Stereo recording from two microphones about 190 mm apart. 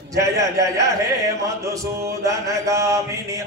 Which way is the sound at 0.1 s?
15° right (ahead or behind).